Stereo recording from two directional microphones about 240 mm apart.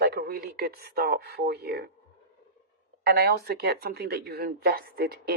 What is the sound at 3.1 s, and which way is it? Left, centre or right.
Speech, right.